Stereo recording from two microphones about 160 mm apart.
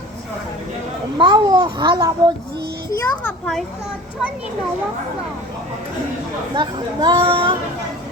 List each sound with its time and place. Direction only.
1.2 s a child's voice: 25° right (ahead or behind)
3.0 s a child's voice: 5° left (ahead or behind)
6.5 s speech: 30° right (ahead or behind)